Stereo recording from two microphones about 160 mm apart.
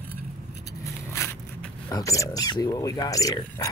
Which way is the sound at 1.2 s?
15° left (ahead or behind).